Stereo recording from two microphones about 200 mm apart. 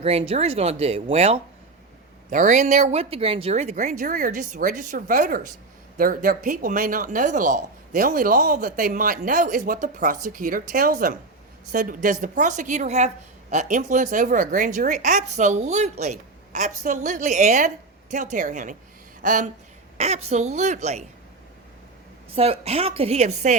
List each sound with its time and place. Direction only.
0.0 s speech: 30° right (ahead or behind)
22.4 s speech: 30° right (ahead or behind)